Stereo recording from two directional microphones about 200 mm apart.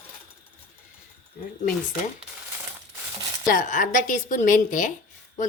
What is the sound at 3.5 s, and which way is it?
A woman's voice, 40° left (ahead or behind).